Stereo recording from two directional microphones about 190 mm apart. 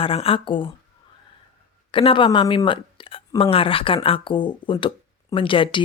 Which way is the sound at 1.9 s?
25° left (ahead or behind).